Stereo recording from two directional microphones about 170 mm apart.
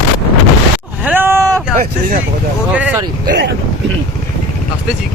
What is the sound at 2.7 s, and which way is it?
Vehicle, 10° right (ahead or behind).